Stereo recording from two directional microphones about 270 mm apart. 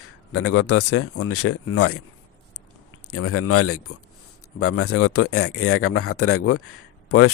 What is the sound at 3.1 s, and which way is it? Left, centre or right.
A man's voice, left.